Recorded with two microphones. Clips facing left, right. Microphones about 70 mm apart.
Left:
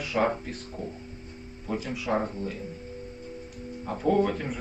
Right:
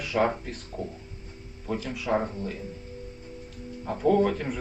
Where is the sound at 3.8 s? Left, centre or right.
Centre.